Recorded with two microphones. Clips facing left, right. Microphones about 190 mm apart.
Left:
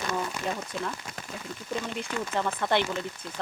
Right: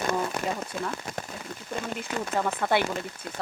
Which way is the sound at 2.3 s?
10° right (ahead or behind).